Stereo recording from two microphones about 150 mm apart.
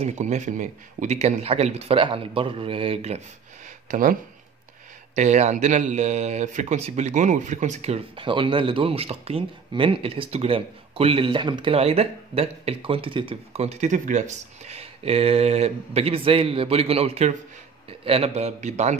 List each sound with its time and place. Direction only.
0.0 s speech: 50° right (ahead or behind)
3.9 s speech: 65° right (ahead or behind)
5.1 s speech: 50° right (ahead or behind)